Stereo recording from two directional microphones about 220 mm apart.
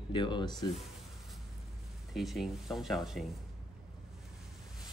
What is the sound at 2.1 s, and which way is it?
Speech, centre (ahead or behind).